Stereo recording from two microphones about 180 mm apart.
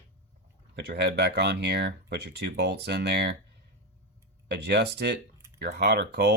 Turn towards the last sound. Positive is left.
turn(degrees=-65)  # may be behind; listen again after turning